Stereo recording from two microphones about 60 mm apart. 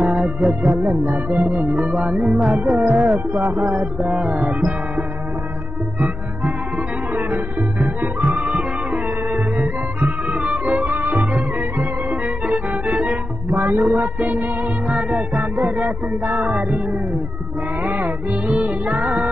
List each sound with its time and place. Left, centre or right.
0.0 s music: centre
5.9 s music: centre
8.5 s music: centre
10.0 s music: centre
12.4 s music: right
13.0 s music: centre
17.8 s music: right